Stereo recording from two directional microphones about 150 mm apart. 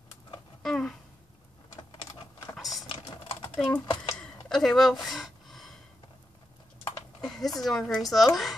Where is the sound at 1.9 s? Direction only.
35° left (ahead or behind).